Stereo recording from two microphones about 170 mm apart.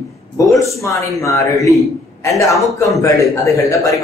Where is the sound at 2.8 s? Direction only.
20° left (ahead or behind).